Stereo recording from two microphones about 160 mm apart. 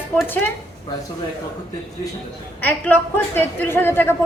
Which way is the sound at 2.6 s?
10° left (ahead or behind).